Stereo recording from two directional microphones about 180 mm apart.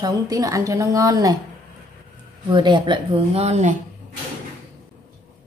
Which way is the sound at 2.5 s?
25° right (ahead or behind).